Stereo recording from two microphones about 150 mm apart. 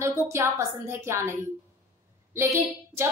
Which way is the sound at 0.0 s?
15° right (ahead or behind).